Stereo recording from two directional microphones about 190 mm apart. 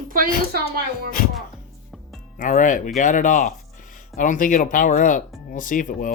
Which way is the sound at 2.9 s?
40° left (ahead or behind).